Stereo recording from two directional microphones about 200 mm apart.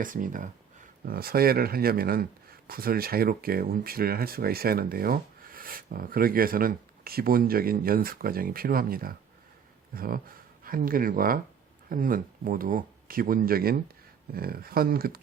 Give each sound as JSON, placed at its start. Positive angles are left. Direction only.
{"t": 0.0, "sound": "speech", "side_deg": -40}